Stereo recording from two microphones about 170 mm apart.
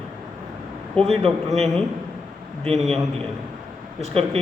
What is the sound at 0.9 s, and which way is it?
Speech, centre (ahead or behind).